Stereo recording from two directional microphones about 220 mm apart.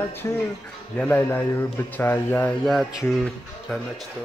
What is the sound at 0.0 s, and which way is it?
Speech, 10° left (ahead or behind).